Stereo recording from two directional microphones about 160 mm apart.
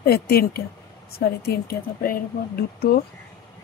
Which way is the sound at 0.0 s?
75° left (ahead or behind).